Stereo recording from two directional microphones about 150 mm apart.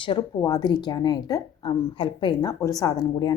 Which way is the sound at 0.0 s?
30° left (ahead or behind).